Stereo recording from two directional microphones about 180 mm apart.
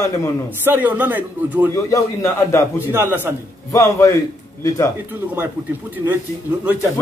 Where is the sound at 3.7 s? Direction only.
20° left (ahead or behind).